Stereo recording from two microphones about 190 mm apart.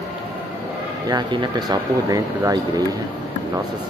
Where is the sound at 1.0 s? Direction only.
25° right (ahead or behind).